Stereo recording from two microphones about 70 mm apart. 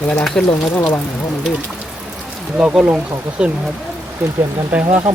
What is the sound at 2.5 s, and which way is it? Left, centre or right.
Speech, centre.